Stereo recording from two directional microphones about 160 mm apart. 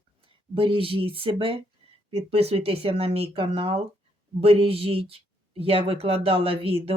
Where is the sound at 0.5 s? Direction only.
35° right (ahead or behind).